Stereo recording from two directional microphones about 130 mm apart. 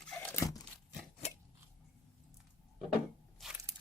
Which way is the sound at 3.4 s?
5° right (ahead or behind).